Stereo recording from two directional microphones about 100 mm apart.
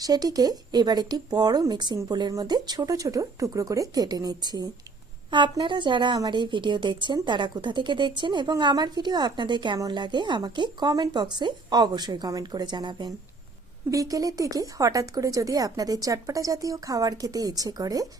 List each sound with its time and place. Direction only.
0.0 s speech: 40° right (ahead or behind)
5.3 s speech: 50° right (ahead or behind)
13.9 s speech: 35° right (ahead or behind)